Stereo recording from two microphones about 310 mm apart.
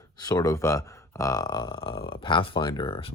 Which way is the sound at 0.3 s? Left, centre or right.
Centre.